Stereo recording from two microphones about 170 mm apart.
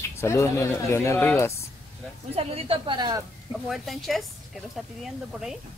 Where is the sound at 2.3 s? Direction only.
35° right (ahead or behind).